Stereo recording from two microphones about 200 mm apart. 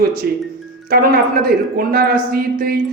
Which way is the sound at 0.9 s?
45° right (ahead or behind).